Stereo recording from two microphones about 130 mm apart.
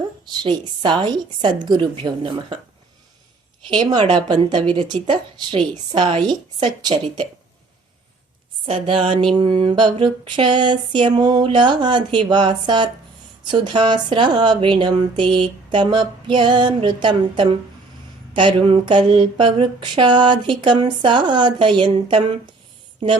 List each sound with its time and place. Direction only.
0.3 s speech: 35° right (ahead or behind)
3.7 s speech: 35° right (ahead or behind)
8.6 s speech: 45° right (ahead or behind)